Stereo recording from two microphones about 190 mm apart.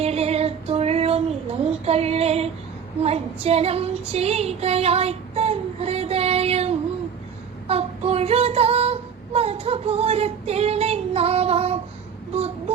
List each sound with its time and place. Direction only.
0.0 s female singing: 35° right (ahead or behind)
7.7 s child singing: 30° right (ahead or behind)
12.3 s a sound: 30° right (ahead or behind)